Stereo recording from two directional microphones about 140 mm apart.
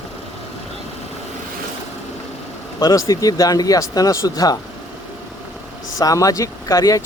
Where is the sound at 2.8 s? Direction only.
25° left (ahead or behind).